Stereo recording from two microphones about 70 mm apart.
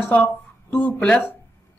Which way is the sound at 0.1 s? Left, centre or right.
Left.